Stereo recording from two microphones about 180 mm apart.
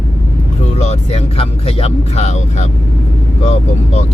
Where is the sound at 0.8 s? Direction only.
35° left (ahead or behind).